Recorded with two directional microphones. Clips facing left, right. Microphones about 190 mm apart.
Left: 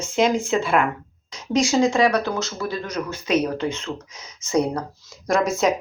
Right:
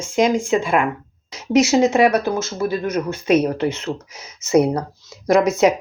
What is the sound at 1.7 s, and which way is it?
Speech, 20° right (ahead or behind).